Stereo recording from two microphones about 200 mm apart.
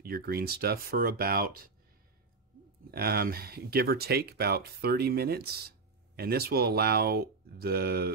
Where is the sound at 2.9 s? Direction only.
50° right (ahead or behind).